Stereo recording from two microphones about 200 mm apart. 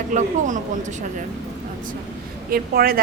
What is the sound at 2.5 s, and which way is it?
Speech, 50° right (ahead or behind).